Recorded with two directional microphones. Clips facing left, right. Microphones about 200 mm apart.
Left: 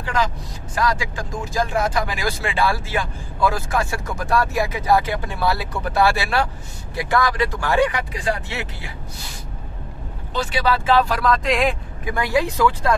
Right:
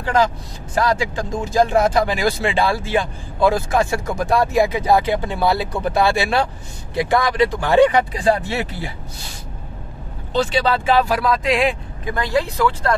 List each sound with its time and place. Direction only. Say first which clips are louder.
0.7 s speech: right 4 dB; 25° right (ahead or behind)
10.3 s speech: right 3 dB; 25° right (ahead or behind)
11.1 s speech: right 1 dB; 5° right (ahead or behind)
12.1 s speech: even; 10° left (ahead or behind)